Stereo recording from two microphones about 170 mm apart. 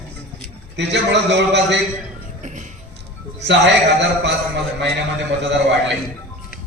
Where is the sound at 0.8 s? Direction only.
90° right.